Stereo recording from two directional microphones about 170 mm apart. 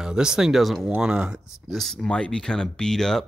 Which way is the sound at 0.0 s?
5° right (ahead or behind).